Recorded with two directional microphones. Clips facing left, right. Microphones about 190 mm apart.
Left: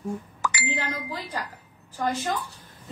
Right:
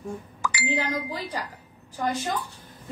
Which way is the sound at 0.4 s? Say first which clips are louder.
Left 1 dB; 55° left (ahead or behind).